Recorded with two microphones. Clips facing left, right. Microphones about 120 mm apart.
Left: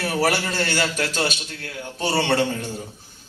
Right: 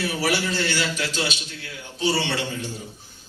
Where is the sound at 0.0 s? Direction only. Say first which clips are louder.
Left 2 dB; 50° left (ahead or behind).